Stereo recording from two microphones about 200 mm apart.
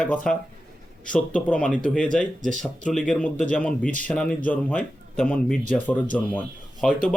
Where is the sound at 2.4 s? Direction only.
40° right (ahead or behind).